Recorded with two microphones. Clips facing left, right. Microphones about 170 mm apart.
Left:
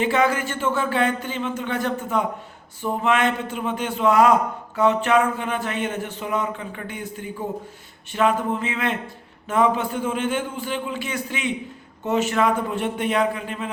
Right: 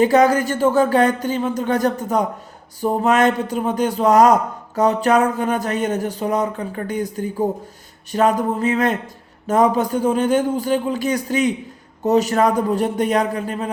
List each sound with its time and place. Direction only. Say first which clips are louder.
0.0 s a man's voice: right 7 dB; 40° right (ahead or behind)